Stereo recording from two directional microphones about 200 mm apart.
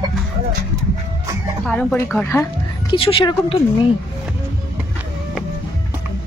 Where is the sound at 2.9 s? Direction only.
30° left (ahead or behind).